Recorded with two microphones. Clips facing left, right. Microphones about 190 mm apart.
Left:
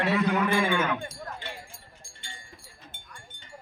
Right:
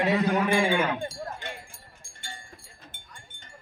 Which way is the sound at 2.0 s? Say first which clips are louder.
Right 4 dB; 50° right (ahead or behind).